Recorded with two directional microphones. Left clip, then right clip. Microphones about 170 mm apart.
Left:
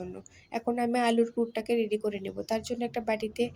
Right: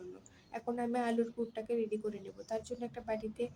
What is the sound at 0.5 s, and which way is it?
Speech, 30° left (ahead or behind).